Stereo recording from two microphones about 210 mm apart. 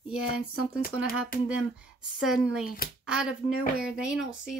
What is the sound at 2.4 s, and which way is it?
Speech, 5° right (ahead or behind).